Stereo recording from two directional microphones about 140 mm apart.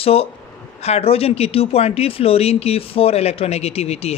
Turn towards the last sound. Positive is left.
turn(degrees=45)  # may be behind; listen again after turning